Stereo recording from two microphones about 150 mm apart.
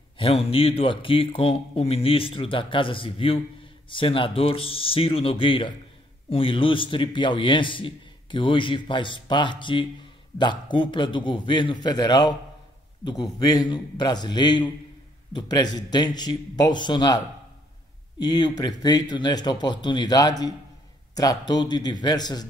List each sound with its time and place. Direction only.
0.2 s a man's voice: 40° left (ahead or behind)
18.2 s speech: 25° left (ahead or behind)